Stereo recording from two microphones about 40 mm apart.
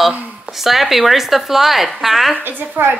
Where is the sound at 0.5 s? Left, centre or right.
Centre.